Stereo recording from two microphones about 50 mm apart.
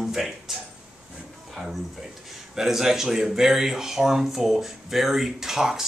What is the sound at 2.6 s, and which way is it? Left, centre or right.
A man's voice, centre.